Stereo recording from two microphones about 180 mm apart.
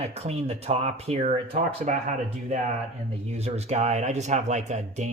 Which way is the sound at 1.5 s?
45° right (ahead or behind).